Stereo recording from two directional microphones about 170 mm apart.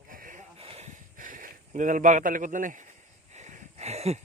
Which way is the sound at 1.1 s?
50° right (ahead or behind).